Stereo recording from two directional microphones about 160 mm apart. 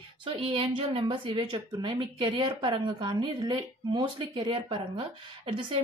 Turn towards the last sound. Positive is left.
turn(degrees=-35)  # may be behind; listen again after turning